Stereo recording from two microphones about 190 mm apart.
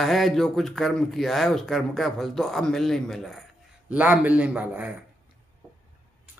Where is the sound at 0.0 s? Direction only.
Centre (ahead or behind).